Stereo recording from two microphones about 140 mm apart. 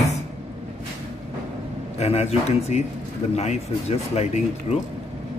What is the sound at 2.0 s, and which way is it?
Speech, 50° left (ahead or behind).